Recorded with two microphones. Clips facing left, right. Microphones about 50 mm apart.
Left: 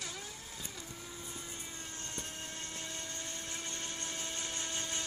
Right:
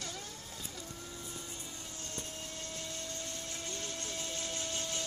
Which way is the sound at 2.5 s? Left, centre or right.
Left.